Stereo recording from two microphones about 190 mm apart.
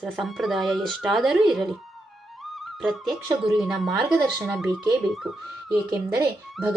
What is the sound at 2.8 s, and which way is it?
Speech, centre (ahead or behind).